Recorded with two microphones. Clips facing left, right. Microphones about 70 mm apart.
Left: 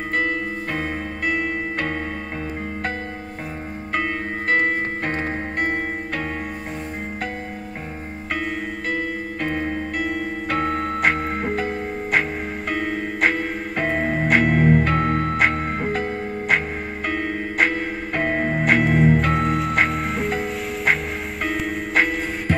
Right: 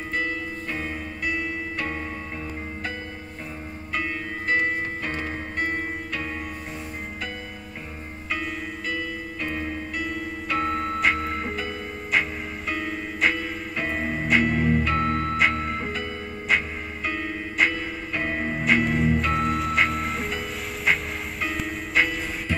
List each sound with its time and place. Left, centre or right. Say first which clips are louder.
0.1 s music: left 5 dB; left
3.9 s music: left 5 dB; left
8.9 s music: left 5 dB; left
19.3 s music: left 3 dB; centre
20.8 s music: left 2 dB; left
21.5 s music: left 6 dB; centre
22.5 s music: left 6 dB; left